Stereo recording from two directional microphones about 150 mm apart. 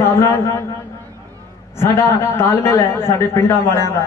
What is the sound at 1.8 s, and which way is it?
A man's voice, 15° left (ahead or behind).